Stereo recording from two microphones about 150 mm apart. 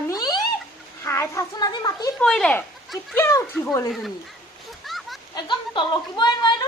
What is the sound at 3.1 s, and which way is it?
Speech, 15° left (ahead or behind).